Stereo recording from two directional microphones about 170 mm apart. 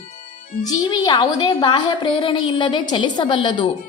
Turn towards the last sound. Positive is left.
turn(degrees=30)  # may be behind; listen again after turning